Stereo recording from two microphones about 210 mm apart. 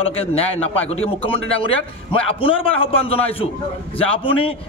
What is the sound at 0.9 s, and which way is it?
A man's voice, 25° left (ahead or behind).